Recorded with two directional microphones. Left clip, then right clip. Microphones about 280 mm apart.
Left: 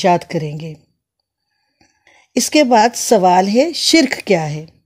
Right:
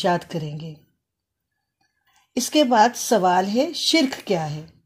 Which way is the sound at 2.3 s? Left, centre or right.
Left.